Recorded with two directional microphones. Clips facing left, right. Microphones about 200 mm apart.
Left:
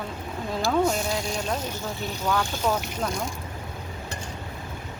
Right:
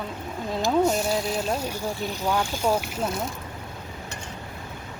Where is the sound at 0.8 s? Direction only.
5° right (ahead or behind).